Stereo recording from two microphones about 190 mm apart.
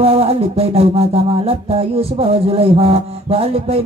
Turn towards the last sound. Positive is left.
turn(degrees=-30)  # may be behind; listen again after turning